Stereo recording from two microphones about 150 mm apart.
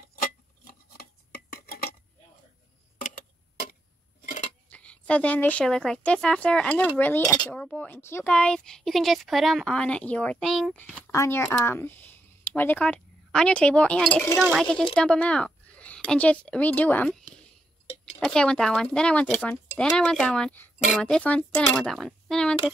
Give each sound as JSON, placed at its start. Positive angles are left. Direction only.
{"t": 0.7, "sound": "filing", "side_deg": 85}
{"t": 3.0, "sound": "clock", "side_deg": 65}
{"t": 4.6, "sound": "speech", "side_deg": 10}
{"t": 11.1, "sound": "speech", "side_deg": 20}